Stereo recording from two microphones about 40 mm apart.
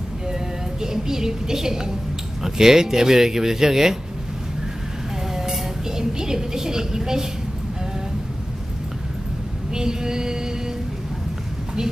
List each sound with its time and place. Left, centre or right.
0.8 s a woman's voice: centre
5.3 s a sound: centre
9.8 s speech: centre